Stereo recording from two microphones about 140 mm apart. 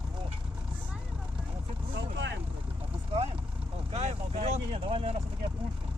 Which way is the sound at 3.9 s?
55° right (ahead or behind).